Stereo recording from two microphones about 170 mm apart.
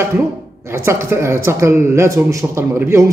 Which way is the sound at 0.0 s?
15° right (ahead or behind).